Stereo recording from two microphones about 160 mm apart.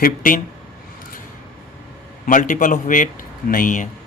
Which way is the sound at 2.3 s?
55° left (ahead or behind).